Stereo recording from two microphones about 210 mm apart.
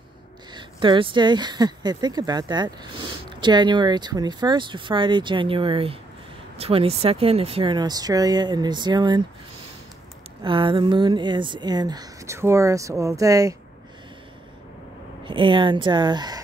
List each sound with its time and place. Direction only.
0.6 s speech: 25° right (ahead or behind)
10.4 s speech: 25° right (ahead or behind)
15.2 s speech: 25° right (ahead or behind)